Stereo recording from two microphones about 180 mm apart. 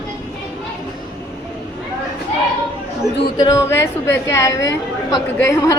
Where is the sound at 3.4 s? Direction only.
15° left (ahead or behind).